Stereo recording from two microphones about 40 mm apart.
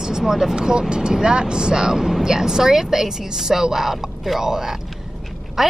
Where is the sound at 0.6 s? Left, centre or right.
Right.